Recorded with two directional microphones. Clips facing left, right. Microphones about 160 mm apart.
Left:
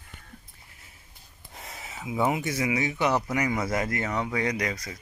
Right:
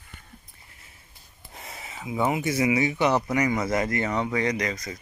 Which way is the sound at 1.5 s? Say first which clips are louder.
Right 1 dB; centre (ahead or behind).